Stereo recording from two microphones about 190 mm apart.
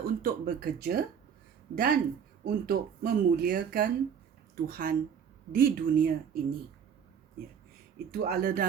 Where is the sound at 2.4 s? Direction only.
50° right (ahead or behind).